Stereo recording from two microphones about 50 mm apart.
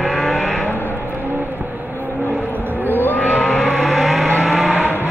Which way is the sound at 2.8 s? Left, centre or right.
Left.